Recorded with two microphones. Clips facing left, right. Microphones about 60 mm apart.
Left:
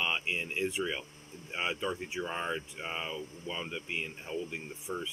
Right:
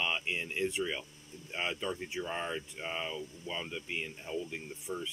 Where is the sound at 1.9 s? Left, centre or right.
Centre.